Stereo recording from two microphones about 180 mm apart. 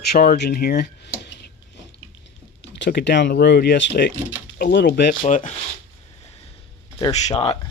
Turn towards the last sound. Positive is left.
turn(degrees=35)  # may be behind; listen again after turning